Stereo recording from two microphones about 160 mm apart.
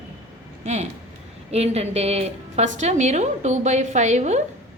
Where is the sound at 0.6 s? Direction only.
45° right (ahead or behind).